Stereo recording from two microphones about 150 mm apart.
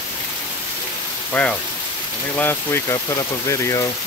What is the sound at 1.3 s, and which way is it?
Speech, 10° left (ahead or behind).